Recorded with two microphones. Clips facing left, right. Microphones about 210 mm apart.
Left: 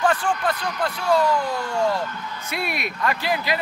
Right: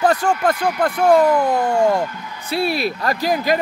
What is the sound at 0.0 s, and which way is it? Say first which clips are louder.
Speech: right 4 dB; 40° right (ahead or behind).